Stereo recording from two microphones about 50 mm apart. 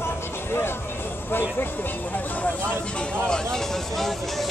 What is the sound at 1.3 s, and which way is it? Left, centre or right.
Speech, left.